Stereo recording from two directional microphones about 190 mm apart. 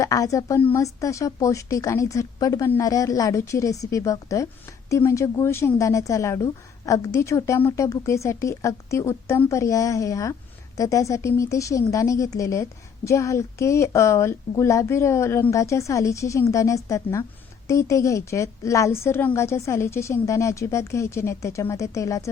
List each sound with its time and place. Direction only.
0.0 s a woman's voice: 15° left (ahead or behind)